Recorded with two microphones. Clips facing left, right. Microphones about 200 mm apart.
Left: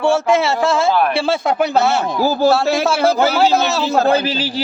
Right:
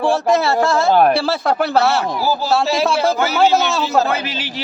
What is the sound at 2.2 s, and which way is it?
Speech, 50° left (ahead or behind).